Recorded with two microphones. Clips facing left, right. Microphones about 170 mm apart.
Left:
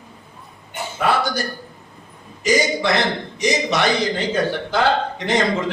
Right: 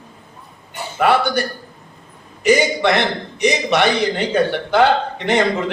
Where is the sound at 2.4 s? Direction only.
65° right (ahead or behind).